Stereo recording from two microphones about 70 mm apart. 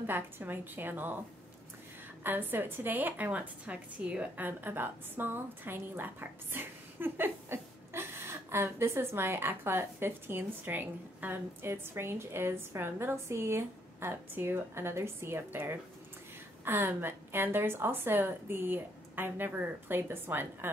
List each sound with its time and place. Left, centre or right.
0.0 s a woman's voice: right
2.2 s a woman's voice: right